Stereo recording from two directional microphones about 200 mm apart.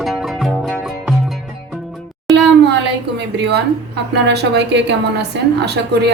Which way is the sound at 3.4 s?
55° right (ahead or behind).